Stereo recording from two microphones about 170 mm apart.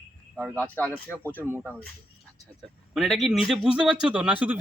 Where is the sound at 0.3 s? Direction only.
10° right (ahead or behind).